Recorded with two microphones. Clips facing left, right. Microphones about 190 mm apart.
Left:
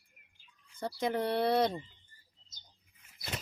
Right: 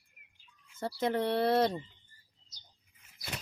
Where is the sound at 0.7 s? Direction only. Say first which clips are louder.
Right 2 dB; centre (ahead or behind).